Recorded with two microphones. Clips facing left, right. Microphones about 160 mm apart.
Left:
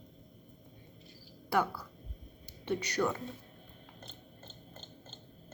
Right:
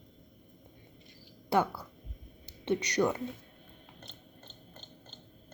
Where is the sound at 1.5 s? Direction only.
25° right (ahead or behind).